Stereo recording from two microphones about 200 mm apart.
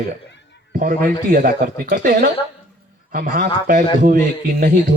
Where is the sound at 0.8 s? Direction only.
45° right (ahead or behind).